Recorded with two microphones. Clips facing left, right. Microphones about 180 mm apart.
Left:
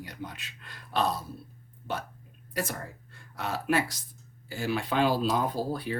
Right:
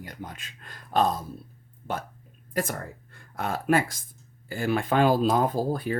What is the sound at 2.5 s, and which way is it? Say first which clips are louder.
Speech: right 4 dB; 55° right (ahead or behind).